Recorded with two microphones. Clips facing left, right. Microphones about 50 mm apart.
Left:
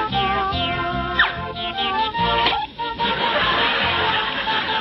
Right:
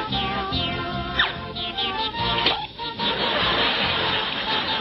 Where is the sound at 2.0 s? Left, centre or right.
Left.